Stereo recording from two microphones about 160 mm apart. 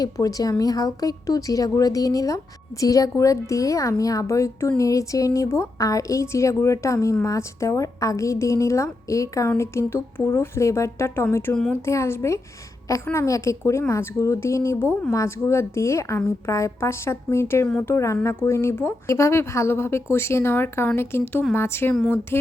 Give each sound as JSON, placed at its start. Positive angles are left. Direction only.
{"t": 0.0, "sound": "a woman's voice", "side_deg": 20}
{"t": 11.5, "sound": "speech", "side_deg": 5}
{"t": 11.9, "sound": "a woman's voice", "side_deg": 15}